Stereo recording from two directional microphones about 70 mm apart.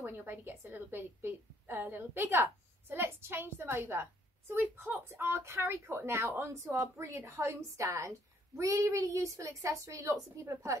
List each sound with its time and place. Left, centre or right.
0.0 s a woman's voice: right
6.2 s speech: right
6.8 s a woman's voice: right